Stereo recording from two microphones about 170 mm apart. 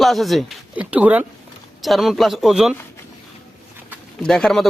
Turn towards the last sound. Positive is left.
turn(degrees=5)  # may be behind; listen again after turning